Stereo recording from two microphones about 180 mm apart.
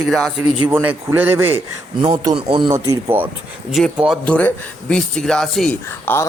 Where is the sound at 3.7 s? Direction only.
Centre (ahead or behind).